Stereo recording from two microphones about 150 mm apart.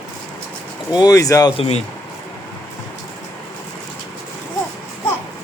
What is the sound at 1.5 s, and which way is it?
Speech, 40° left (ahead or behind).